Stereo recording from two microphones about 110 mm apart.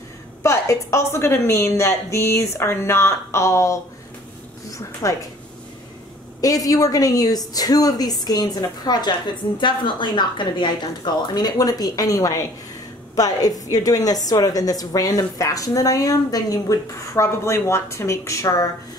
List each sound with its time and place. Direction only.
0.4 s a woman's voice: 25° left (ahead or behind)
6.4 s a woman's voice: 35° left (ahead or behind)